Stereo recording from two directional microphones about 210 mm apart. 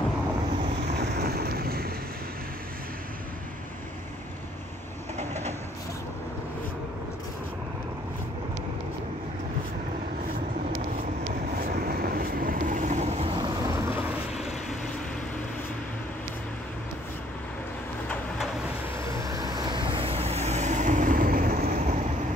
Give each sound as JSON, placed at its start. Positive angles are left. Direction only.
{"t": 0.9, "sound": "vehicle", "side_deg": -45}
{"t": 5.1, "sound": "train", "side_deg": -35}
{"t": 11.8, "sound": "vehicle", "side_deg": -45}
{"t": 18.9, "sound": "vehicle", "side_deg": -15}